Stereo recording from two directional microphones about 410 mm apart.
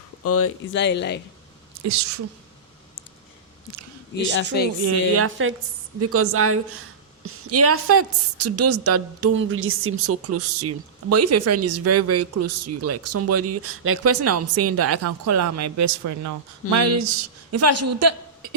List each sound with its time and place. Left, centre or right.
0.2 s speech: left
1.8 s a woman's voice: right
4.8 s a woman's voice: right